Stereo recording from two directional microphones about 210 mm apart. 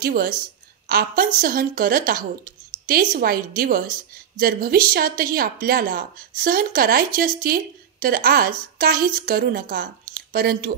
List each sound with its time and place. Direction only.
0.0 s speech: 45° right (ahead or behind)